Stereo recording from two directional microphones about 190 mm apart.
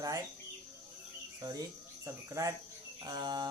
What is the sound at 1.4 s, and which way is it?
Cricket, 20° right (ahead or behind).